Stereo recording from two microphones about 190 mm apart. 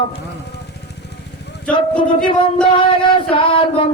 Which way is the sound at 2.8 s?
25° left (ahead or behind).